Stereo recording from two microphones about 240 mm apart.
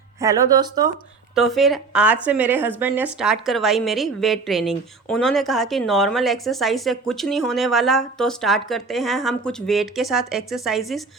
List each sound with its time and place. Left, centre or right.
0.2 s speech: centre
1.4 s a woman's voice: centre